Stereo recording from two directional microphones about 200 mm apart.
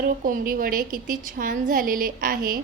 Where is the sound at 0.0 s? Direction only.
45° right (ahead or behind).